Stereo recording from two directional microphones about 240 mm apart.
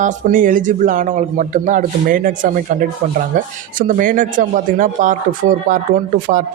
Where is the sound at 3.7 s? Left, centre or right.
Right.